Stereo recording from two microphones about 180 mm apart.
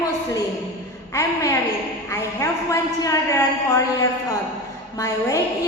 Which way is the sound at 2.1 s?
15° left (ahead or behind).